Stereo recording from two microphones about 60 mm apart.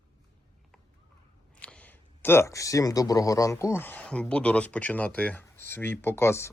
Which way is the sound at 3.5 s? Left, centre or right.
Left.